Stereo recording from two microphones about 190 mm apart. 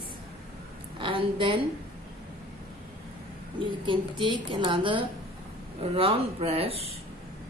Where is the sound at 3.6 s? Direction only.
25° right (ahead or behind).